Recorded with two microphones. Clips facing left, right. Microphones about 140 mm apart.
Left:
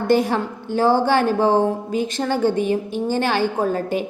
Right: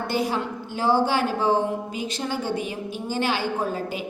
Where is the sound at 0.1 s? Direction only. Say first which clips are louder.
Left 8 dB; 50° left (ahead or behind).